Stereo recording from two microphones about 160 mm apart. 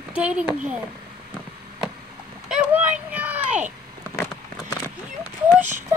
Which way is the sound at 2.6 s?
10° right (ahead or behind).